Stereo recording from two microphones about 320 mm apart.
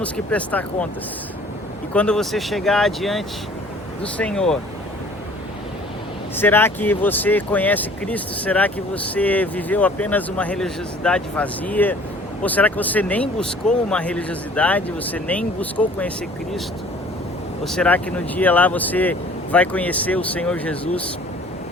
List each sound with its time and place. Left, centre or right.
0.0 s speech: centre
1.9 s speech: centre
6.3 s speech: centre